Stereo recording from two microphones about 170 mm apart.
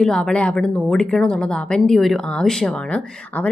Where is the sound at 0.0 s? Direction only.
5° left (ahead or behind).